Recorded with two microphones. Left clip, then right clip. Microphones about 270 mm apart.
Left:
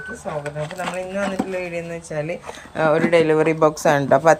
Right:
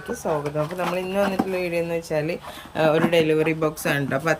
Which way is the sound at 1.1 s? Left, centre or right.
Centre.